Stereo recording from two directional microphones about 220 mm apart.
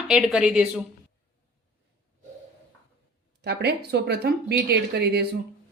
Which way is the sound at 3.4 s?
50° right (ahead or behind).